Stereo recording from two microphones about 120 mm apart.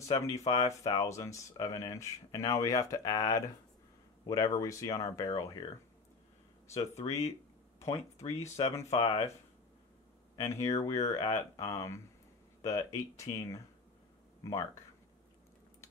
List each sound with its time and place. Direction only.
0.5 s speech: 30° left (ahead or behind)
7.0 s speech: 65° left (ahead or behind)
10.3 s speech: 25° left (ahead or behind)